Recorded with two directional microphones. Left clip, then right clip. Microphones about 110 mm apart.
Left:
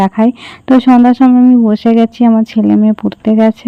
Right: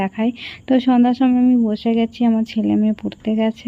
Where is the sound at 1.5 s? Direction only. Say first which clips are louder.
Left 9 dB; 45° left (ahead or behind).